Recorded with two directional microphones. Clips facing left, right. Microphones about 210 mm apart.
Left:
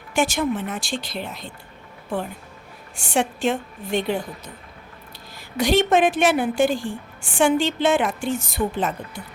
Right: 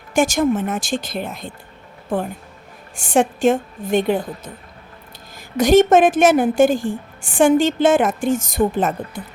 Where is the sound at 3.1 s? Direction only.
50° right (ahead or behind).